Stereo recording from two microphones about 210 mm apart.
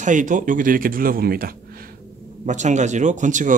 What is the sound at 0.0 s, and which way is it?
A man's voice, 35° right (ahead or behind).